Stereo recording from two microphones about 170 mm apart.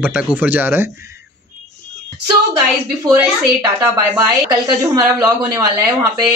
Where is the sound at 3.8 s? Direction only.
20° right (ahead or behind).